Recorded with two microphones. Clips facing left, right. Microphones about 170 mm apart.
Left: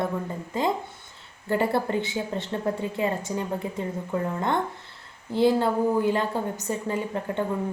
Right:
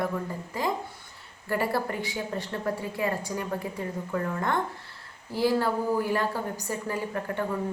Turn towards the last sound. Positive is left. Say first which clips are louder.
# left 3 dB
turn(degrees=20)  # may be behind; listen again after turning